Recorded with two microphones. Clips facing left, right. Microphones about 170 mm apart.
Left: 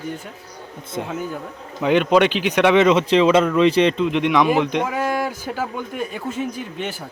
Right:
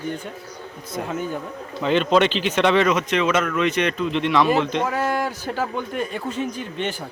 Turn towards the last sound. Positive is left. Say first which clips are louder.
# right 1 dB
turn(degrees=5)  # may be behind; listen again after turning